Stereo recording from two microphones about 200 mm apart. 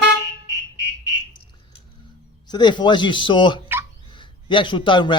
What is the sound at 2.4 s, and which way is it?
A man's voice, 20° left (ahead or behind).